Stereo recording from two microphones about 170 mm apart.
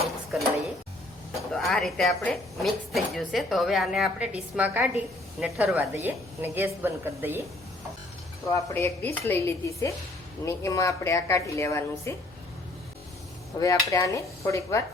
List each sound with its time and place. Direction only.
0.0 s dishes: centre (ahead or behind)
1.5 s a woman's voice: centre (ahead or behind)
8.5 s a woman's voice: 15° left (ahead or behind)
13.6 s speech: 20° left (ahead or behind)